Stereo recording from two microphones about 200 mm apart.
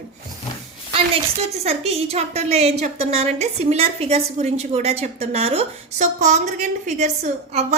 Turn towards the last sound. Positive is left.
turn(degrees=-35)  # may be behind; listen again after turning